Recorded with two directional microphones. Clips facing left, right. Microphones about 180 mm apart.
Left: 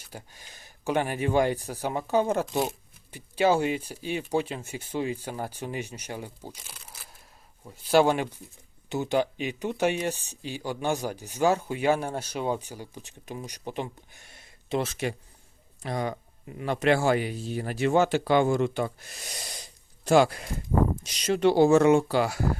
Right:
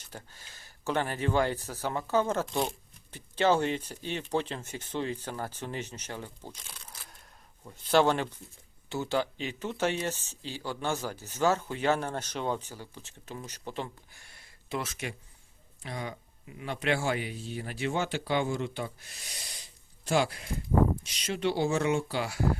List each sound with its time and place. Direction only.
0.0 s speech: 10° left (ahead or behind); by 15.1 s 30° left (ahead or behind)
15.8 s speech: 45° left (ahead or behind)